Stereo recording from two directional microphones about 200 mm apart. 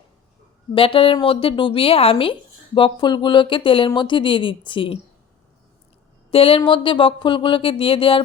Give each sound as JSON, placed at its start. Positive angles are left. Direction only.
{"t": 0.7, "sound": "speech", "side_deg": 25}
{"t": 6.3, "sound": "speech", "side_deg": 30}